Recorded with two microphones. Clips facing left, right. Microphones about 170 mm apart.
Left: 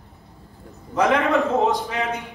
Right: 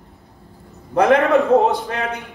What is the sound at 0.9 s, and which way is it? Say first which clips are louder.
A man's voice: right 5 dB; 60° right (ahead or behind).